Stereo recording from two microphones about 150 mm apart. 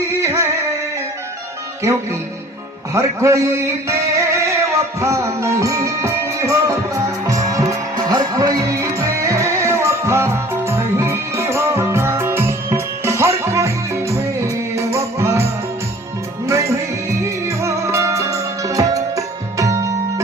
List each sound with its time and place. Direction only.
0.2 s music: 20° right (ahead or behind)
1.8 s a man's voice: 20° right (ahead or behind)
4.4 s music: 20° right (ahead or behind)
16.5 s music: 20° right (ahead or behind)